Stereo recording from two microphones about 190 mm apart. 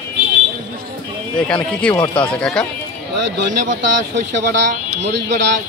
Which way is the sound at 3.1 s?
65° right (ahead or behind).